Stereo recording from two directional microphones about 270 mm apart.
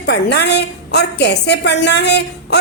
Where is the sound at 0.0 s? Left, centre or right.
Left.